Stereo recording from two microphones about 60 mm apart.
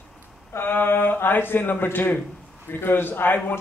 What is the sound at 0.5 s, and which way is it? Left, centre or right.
Speech, left.